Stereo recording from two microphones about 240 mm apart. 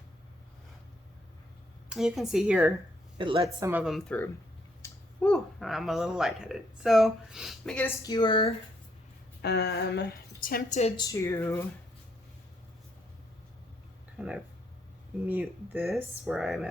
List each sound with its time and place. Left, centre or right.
1.9 s speech: centre
3.2 s speech: right; by 8.5 s centre
9.4 s a woman's voice: left; by 11.6 s centre
14.2 s speech: centre